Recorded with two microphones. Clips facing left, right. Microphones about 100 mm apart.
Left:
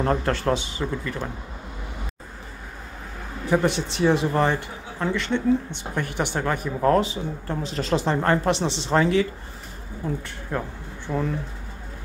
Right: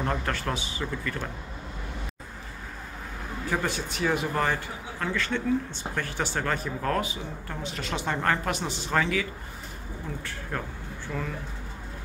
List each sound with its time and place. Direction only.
0.0 s speech: 35° left (ahead or behind)
3.4 s speech: 20° left (ahead or behind)
10.5 s speech: 20° left (ahead or behind)
11.1 s speech: 30° left (ahead or behind)